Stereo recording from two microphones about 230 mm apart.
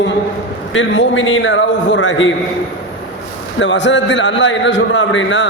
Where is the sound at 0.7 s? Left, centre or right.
Left.